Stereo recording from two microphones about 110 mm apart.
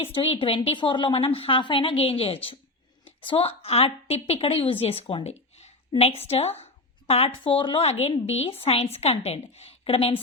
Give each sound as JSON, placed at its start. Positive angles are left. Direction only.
{"t": 0.0, "sound": "a woman's voice", "side_deg": 60}
{"t": 7.1, "sound": "speech", "side_deg": 60}